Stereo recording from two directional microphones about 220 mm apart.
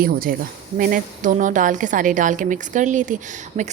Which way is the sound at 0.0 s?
40° right (ahead or behind).